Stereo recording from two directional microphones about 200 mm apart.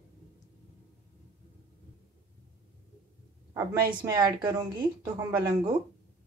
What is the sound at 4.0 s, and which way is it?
Speech, 15° right (ahead or behind).